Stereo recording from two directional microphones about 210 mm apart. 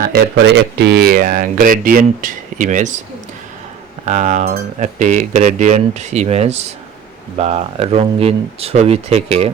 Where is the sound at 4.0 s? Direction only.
35° right (ahead or behind).